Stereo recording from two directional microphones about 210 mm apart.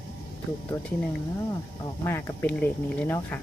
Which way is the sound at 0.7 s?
20° left (ahead or behind).